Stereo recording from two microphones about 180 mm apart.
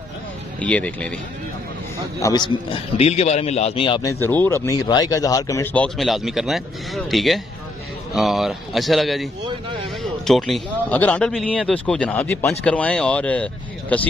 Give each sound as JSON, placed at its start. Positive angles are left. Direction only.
{"t": 0.6, "sound": "speech", "side_deg": 10}
{"t": 2.1, "sound": "a man's voice", "side_deg": 20}
{"t": 4.1, "sound": "speech", "side_deg": 10}
{"t": 4.6, "sound": "speech", "side_deg": 20}